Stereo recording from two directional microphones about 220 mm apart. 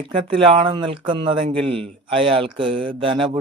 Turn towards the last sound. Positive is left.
turn(degrees=-25)  # may be behind; listen again after turning